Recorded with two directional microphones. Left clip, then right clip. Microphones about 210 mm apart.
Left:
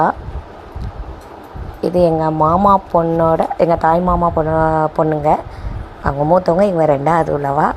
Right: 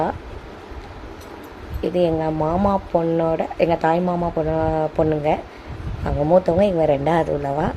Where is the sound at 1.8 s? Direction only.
15° left (ahead or behind).